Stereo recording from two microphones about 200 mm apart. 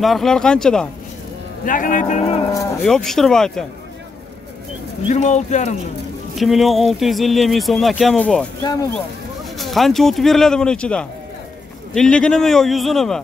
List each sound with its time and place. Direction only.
0.0 s speech: centre (ahead or behind)
1.6 s a man's voice: 40° left (ahead or behind)
2.8 s speech: centre (ahead or behind)
5.1 s a man's voice: 35° left (ahead or behind)
6.3 s speech: centre (ahead or behind)
9.6 s speech: centre (ahead or behind)